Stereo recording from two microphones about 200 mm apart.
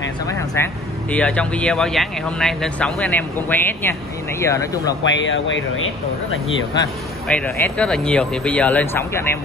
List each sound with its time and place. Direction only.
0.6 s speech: 10° left (ahead or behind)
5.1 s speech: 70° left (ahead or behind)
7.2 s speech: 5° left (ahead or behind)